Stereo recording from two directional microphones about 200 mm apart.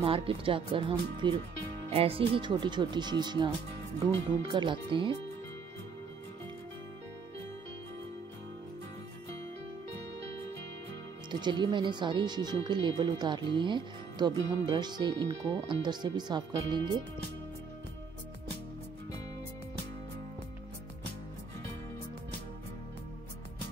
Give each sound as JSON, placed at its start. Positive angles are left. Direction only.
{"t": 0.0, "sound": "speech", "side_deg": -30}
{"t": 11.2, "sound": "speech", "side_deg": -20}